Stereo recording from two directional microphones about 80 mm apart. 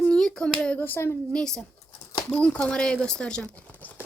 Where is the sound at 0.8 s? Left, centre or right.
Left.